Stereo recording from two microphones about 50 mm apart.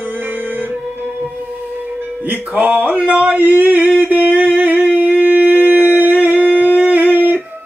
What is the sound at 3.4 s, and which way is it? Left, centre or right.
Speech, right.